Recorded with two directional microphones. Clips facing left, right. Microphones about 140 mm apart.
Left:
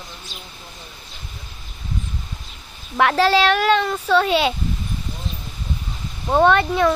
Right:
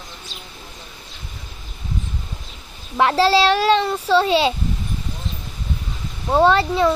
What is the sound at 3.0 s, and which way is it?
Speech, 25° right (ahead or behind).